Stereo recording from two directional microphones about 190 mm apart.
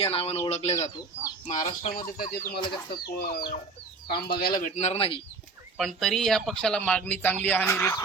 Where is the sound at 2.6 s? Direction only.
25° left (ahead or behind).